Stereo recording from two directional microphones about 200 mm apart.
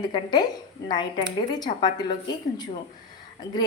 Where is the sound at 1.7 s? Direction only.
20° left (ahead or behind).